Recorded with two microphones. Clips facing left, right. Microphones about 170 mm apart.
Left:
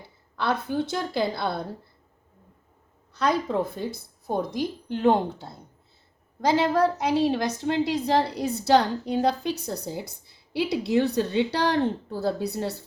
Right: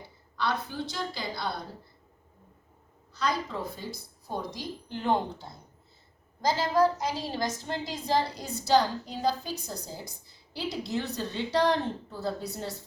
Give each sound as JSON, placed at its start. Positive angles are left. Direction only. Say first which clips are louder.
{"t": 0.3, "sound": "a woman's voice", "louder": "left 5 dB", "side_deg": 55}
{"t": 3.1, "sound": "a woman's voice", "louder": "left 6 dB", "side_deg": 60}